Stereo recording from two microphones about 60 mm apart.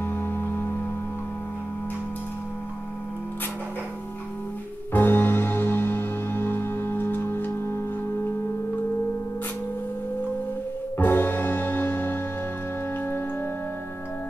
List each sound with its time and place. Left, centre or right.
0.0 s music: left
4.9 s music: left
11.0 s music: left